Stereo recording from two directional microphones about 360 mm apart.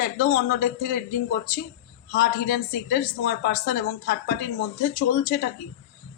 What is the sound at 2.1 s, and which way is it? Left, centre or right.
Speech, left.